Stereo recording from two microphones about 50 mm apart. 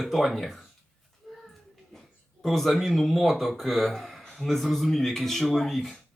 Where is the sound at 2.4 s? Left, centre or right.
Centre.